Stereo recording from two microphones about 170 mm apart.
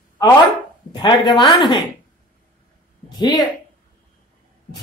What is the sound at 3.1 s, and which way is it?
Speech, 25° left (ahead or behind).